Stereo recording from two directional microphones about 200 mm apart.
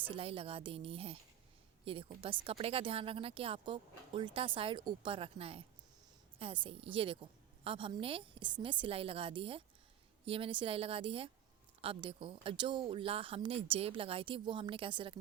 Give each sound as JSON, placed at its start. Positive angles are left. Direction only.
{"t": 0.0, "sound": "a woman's voice", "side_deg": -25}